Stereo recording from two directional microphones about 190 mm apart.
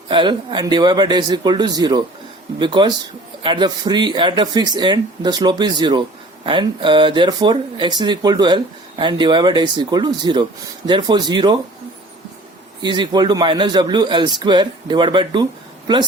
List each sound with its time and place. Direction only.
0.1 s speech: 25° right (ahead or behind)
12.8 s speech: 25° right (ahead or behind)